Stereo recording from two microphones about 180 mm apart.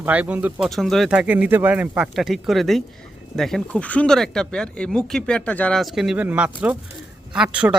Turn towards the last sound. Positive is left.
turn(degrees=-5)  # may be behind; listen again after turning